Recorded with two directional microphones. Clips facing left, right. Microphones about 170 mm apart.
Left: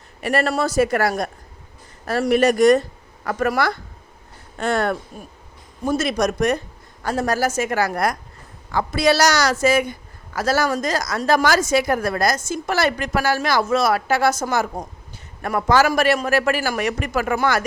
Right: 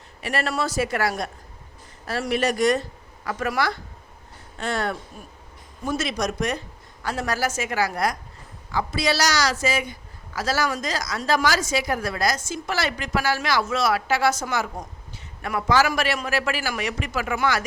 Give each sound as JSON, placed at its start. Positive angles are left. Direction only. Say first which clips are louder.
{"t": 0.2, "sound": "a man's voice", "louder": "left 5 dB", "side_deg": 50}
{"t": 2.3, "sound": "a man's voice", "louder": "left 7 dB", "side_deg": 50}
{"t": 5.8, "sound": "a man's voice", "louder": "left 6 dB", "side_deg": 40}